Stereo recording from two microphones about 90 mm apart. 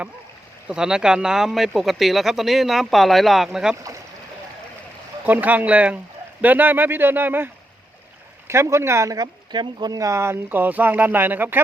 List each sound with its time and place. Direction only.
0.7 s speech: 5° right (ahead or behind)
5.2 s speech: 20° right (ahead or behind)